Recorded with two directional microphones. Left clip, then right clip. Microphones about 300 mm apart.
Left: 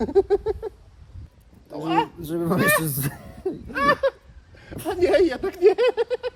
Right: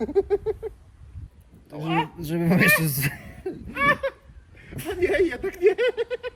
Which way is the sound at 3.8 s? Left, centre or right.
Left.